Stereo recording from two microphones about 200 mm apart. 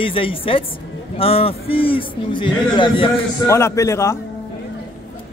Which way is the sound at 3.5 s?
15° left (ahead or behind).